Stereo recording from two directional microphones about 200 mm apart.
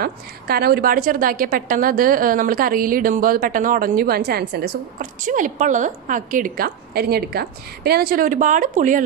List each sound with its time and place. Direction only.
0.0 s a woman's voice: 50° right (ahead or behind)